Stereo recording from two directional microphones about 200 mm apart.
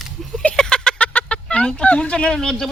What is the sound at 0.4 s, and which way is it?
Fowl, 5° left (ahead or behind).